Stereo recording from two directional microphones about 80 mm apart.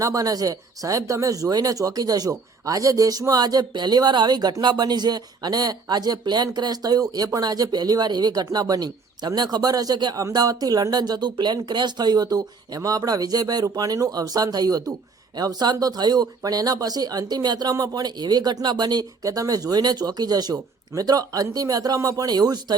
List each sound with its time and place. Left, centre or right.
0.0 s speech: right